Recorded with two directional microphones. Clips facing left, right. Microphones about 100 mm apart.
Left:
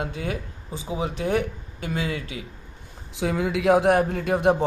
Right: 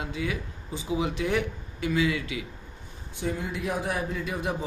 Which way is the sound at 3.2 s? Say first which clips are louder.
Left 7 dB; 90° left.